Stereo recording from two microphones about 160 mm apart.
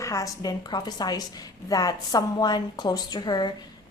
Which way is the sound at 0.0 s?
20° left (ahead or behind).